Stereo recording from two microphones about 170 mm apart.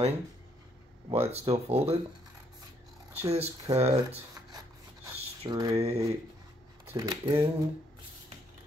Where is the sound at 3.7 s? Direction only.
35° right (ahead or behind).